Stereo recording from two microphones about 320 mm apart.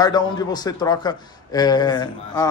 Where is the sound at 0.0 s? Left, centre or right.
Centre.